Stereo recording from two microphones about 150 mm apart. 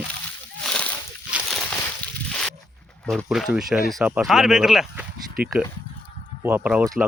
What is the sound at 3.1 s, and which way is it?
Speech, centre (ahead or behind).